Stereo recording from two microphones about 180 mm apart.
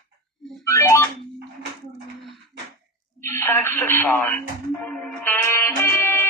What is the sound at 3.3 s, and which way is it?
Radio, 10° left (ahead or behind).